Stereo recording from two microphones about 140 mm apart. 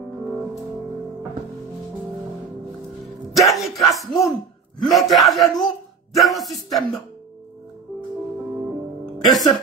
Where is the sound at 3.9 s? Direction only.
Centre (ahead or behind).